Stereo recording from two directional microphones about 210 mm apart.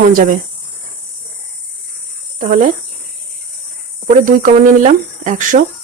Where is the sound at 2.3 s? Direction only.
40° right (ahead or behind).